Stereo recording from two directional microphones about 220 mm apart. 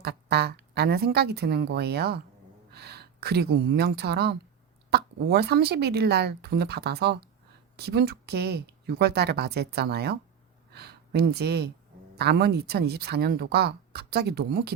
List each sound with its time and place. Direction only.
0.0 s a woman's voice: 45° right (ahead or behind)